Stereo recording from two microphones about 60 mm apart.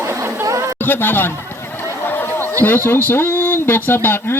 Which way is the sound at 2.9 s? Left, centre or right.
Left.